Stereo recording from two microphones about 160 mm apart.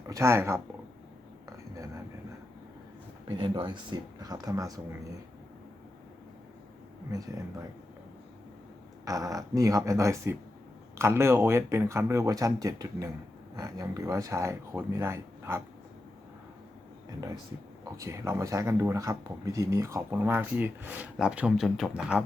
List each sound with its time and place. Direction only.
0.1 s speech: 15° right (ahead or behind)
1.5 s a sound: 20° right (ahead or behind)
3.2 s speech: 30° right (ahead or behind)
9.0 s speech: 20° right (ahead or behind)
17.9 s speech: 20° right (ahead or behind); by 22.2 s centre (ahead or behind)